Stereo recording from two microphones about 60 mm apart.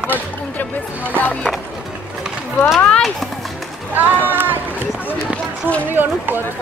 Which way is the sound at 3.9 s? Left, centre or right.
Right.